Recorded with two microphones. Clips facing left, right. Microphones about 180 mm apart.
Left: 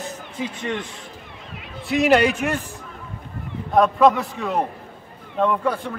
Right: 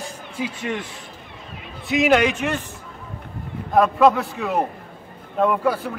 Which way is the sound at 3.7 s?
Centre (ahead or behind).